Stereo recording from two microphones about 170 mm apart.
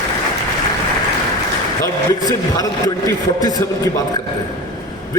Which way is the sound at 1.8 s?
20° left (ahead or behind).